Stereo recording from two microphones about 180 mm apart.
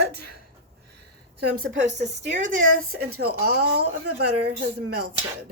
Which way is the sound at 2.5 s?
90° right.